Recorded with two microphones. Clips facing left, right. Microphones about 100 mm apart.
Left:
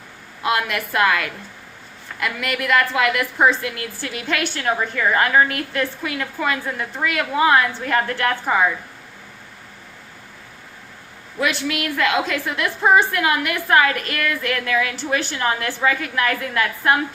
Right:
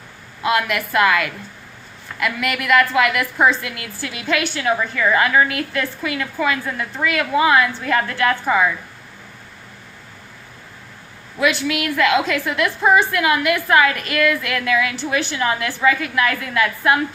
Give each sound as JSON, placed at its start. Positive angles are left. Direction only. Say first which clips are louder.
{"t": 0.5, "sound": "a woman's voice", "louder": "right 3 dB", "side_deg": 30}
{"t": 11.8, "sound": "a woman's voice", "louder": "right 3 dB", "side_deg": 30}